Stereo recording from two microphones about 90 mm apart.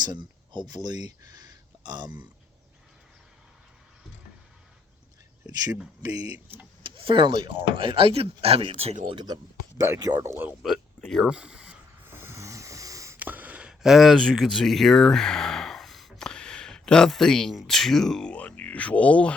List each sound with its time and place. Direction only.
0.0 s speech: 55° right (ahead or behind)
6.2 s speech: 15° right (ahead or behind)
6.8 s speech: 75° right (ahead or behind)
9.2 s speech: 45° right (ahead or behind)
10.2 s speech: 25° right (ahead or behind)
10.6 s speech: centre (ahead or behind)
11.3 s a sound: 10° right (ahead or behind)
12.0 s wheeze: 25° right (ahead or behind)
13.1 s a sound: 20° right (ahead or behind); by 14.2 s 5° right (ahead or behind)
14.2 s speech: centre (ahead or behind)